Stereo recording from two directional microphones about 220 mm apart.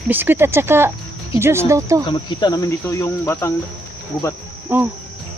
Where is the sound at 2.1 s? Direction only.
20° left (ahead or behind).